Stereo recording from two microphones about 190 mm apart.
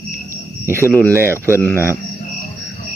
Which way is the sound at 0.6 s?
15° right (ahead or behind).